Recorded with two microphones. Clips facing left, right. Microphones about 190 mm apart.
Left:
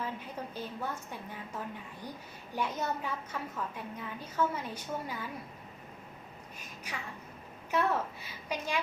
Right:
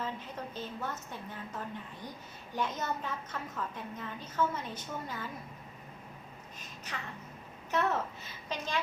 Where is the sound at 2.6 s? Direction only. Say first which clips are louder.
Left 1 dB; 10° left (ahead or behind).